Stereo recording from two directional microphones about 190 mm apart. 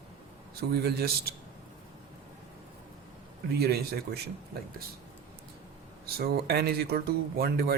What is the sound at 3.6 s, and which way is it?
Speech, 55° right (ahead or behind).